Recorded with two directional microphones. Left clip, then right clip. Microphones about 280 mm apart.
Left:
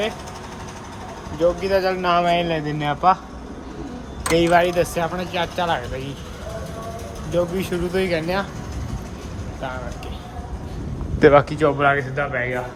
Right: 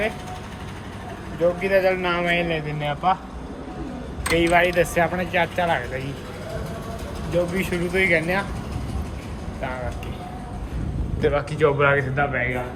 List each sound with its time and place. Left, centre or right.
1.4 s speech: centre
4.3 s speech: left
7.6 s speech: centre
11.2 s speech: left
11.5 s speech: centre